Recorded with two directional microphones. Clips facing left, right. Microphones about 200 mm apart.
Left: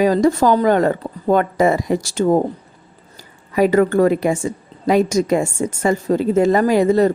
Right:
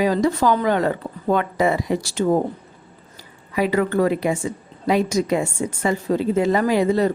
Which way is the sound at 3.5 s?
45° left (ahead or behind).